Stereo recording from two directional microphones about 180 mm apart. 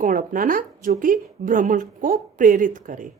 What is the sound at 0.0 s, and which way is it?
Speech, 50° right (ahead or behind).